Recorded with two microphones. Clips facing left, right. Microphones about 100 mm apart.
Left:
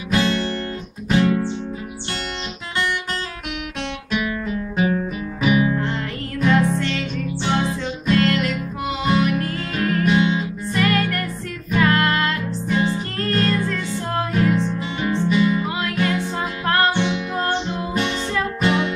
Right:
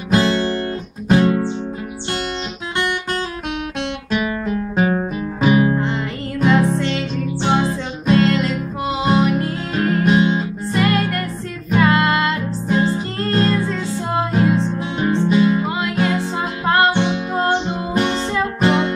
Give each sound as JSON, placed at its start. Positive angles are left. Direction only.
{"t": 0.1, "sound": "guitar", "side_deg": -35}
{"t": 1.0, "sound": "music", "side_deg": -40}
{"t": 4.7, "sound": "music", "side_deg": -40}
{"t": 6.6, "sound": "music", "side_deg": -25}
{"t": 7.4, "sound": "music", "side_deg": -40}
{"t": 10.7, "sound": "music", "side_deg": -25}
{"t": 12.3, "sound": "music", "side_deg": -35}
{"t": 15.0, "sound": "music", "side_deg": -40}
{"t": 16.8, "sound": "music", "side_deg": -35}
{"t": 17.4, "sound": "music", "side_deg": -25}
{"t": 17.9, "sound": "music", "side_deg": -40}